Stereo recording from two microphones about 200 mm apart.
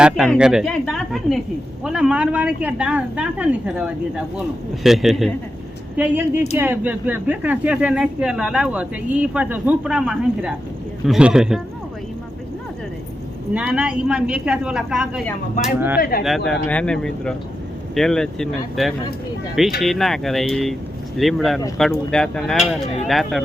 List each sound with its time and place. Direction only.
0.0 s a woman's voice: 5° right (ahead or behind)
13.5 s a woman's voice: 5° right (ahead or behind)
16.0 s speech: 50° left (ahead or behind)
16.5 s a woman's voice: 5° left (ahead or behind)